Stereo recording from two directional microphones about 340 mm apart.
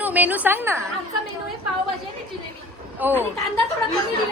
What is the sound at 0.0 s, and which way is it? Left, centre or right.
Speech, centre.